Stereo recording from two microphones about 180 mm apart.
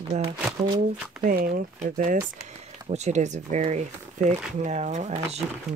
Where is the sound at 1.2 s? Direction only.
50° right (ahead or behind).